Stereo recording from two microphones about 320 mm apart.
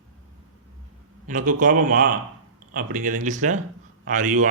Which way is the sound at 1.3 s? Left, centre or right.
Right.